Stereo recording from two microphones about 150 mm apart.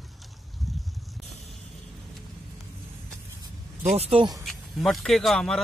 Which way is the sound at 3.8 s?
45° right (ahead or behind).